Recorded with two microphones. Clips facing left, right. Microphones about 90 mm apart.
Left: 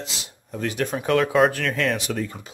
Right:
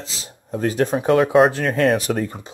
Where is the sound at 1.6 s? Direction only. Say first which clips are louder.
Right 6 dB; 40° right (ahead or behind).